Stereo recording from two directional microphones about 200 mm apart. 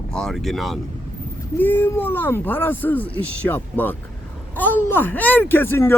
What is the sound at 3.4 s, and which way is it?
Speech, 10° left (ahead or behind).